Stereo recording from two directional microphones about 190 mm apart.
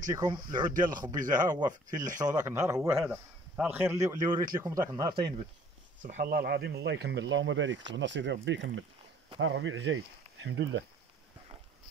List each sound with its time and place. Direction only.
0.1 s speech: 20° right (ahead or behind)
0.7 s speech: 45° right (ahead or behind)
1.5 s a man's voice: 20° right (ahead or behind)
6.0 s speech: 45° right (ahead or behind); by 7.8 s 80° right
7.9 s speech: 70° right (ahead or behind)
9.4 s speech: 80° right